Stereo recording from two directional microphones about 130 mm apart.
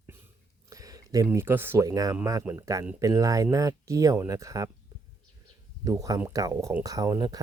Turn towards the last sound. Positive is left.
turn(degrees=-30)  # may be behind; listen again after turning